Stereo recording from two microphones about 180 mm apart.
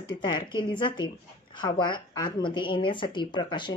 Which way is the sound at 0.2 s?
25° left (ahead or behind).